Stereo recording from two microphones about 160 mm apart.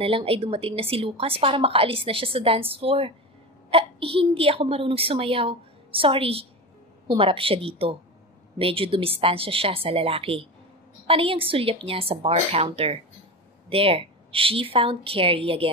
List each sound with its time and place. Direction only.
0.0 s a woman's voice: 35° right (ahead or behind)